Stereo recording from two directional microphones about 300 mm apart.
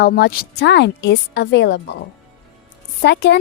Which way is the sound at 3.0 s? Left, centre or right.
Left.